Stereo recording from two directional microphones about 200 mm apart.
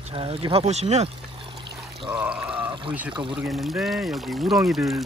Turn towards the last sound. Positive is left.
turn(degrees=0)  # may be behind; listen again after turning